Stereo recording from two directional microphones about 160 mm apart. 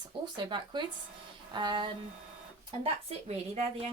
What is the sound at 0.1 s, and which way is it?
Speech, 30° right (ahead or behind).